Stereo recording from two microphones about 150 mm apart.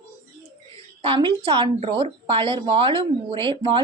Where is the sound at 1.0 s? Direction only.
35° right (ahead or behind).